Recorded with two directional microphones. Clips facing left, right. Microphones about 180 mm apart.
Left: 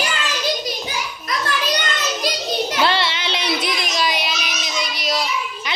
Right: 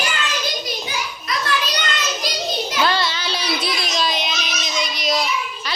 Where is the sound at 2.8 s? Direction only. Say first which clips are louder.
Right 2 dB; 25° left (ahead or behind).